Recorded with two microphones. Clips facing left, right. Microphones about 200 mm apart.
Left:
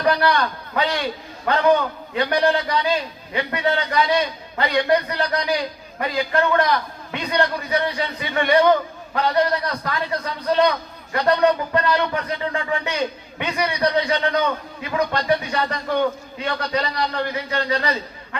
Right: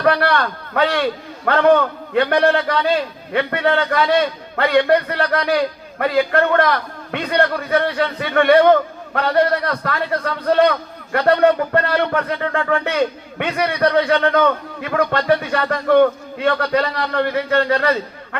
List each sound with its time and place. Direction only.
0.0 s a man's voice: 55° right (ahead or behind)